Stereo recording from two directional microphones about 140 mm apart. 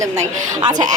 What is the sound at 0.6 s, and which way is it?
Speech, 30° right (ahead or behind).